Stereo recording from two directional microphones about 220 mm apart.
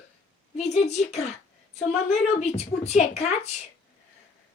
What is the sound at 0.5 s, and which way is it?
A woman's voice, 30° left (ahead or behind).